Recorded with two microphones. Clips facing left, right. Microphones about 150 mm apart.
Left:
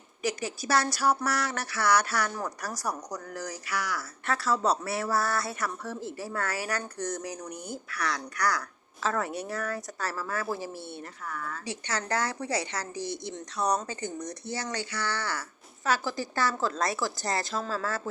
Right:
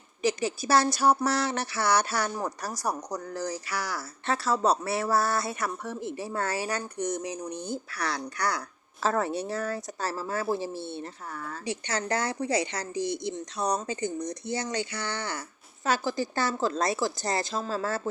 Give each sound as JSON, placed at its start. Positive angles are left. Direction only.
{"t": 0.2, "sound": "speech", "side_deg": -25}